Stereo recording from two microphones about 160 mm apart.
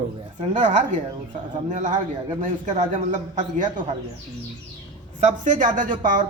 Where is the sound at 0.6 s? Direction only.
50° right (ahead or behind).